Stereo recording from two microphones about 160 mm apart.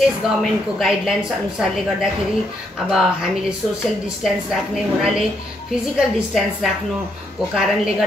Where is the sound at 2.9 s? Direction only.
5° right (ahead or behind).